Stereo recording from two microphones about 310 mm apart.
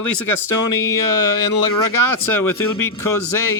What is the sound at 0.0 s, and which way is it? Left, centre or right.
Speech, left.